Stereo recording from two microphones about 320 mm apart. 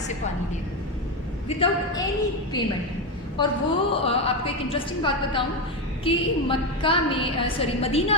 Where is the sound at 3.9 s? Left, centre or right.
Centre.